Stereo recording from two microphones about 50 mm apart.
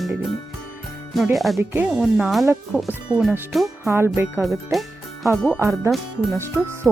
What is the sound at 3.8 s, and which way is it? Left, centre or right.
Music, right.